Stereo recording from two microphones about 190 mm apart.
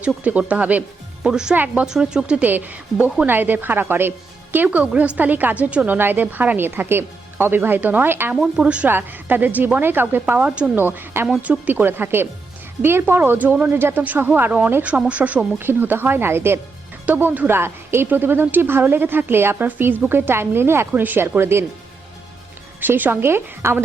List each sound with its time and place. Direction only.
0.0 s a woman's voice: 5° right (ahead or behind)
22.8 s a woman's voice: 10° right (ahead or behind)